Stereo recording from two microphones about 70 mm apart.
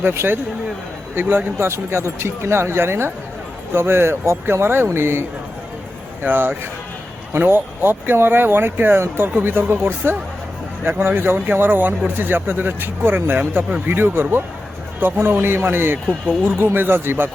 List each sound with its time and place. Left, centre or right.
0.0 s speech: right
6.2 s speech: right